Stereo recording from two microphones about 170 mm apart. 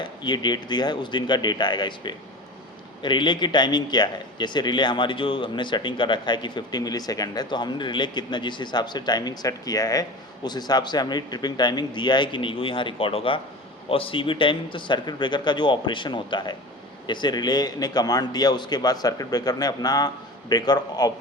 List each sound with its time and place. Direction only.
0.0 s a man's voice: 25° left (ahead or behind)